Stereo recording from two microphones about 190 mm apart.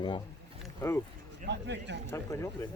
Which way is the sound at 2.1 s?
15° left (ahead or behind).